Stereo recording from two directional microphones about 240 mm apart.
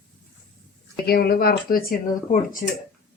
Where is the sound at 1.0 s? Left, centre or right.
Left.